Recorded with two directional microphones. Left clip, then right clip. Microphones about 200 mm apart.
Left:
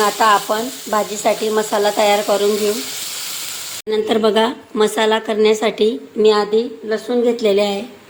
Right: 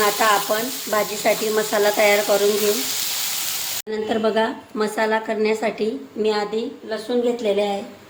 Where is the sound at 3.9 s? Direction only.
35° left (ahead or behind).